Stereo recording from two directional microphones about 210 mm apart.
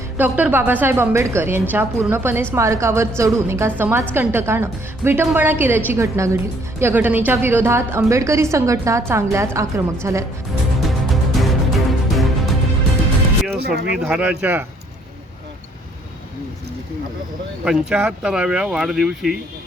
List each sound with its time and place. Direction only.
0.2 s a woman's voice: 10° right (ahead or behind)
10.8 s music: centre (ahead or behind)
13.7 s speech: 50° right (ahead or behind)
13.9 s speech: 5° right (ahead or behind)
17.7 s speech: 5° right (ahead or behind)